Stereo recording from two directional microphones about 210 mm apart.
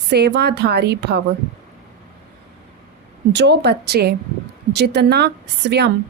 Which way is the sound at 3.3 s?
55° right (ahead or behind).